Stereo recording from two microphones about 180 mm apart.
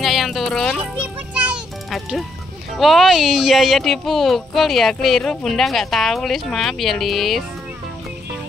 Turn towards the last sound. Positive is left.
turn(degrees=0)  # may be behind; listen again after turning